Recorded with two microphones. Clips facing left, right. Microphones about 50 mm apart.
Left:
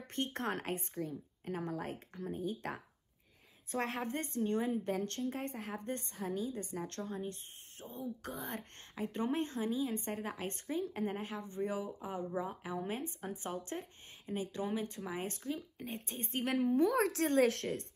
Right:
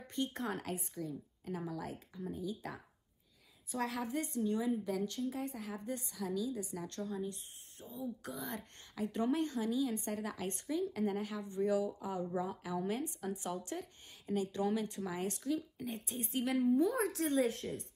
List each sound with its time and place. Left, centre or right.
0.0 s a woman's voice: left